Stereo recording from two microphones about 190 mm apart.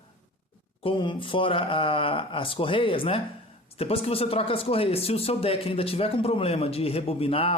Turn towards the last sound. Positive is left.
turn(degrees=30)  # may be behind; listen again after turning